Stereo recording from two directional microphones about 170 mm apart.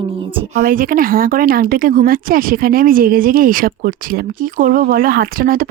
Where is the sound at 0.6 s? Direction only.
55° right (ahead or behind).